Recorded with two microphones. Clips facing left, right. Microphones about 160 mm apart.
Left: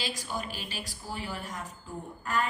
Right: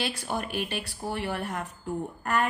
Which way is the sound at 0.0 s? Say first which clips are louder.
Right 4 dB; 60° right (ahead or behind).